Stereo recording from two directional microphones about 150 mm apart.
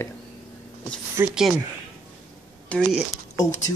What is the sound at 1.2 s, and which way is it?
Speech, 15° right (ahead or behind).